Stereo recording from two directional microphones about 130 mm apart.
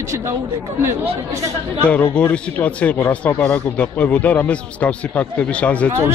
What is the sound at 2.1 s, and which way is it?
Speech, 10° left (ahead or behind).